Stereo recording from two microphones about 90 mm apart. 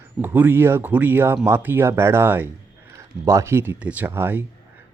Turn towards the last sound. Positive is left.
turn(degrees=-25)  # may be behind; listen again after turning